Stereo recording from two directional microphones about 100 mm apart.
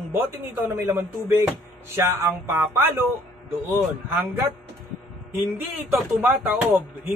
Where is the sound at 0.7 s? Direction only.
30° right (ahead or behind).